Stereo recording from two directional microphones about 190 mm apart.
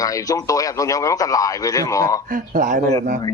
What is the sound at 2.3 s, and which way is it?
Speech, 40° right (ahead or behind).